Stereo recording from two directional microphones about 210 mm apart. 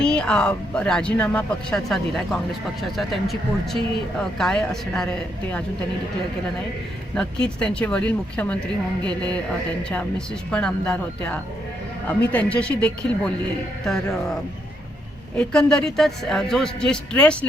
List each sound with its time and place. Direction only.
0.0 s speech: 5° left (ahead or behind)
7.2 s speech: 5° left (ahead or behind)
15.4 s speech: 5° left (ahead or behind)